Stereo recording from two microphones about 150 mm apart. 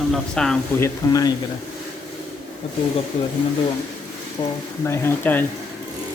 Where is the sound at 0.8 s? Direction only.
25° left (ahead or behind).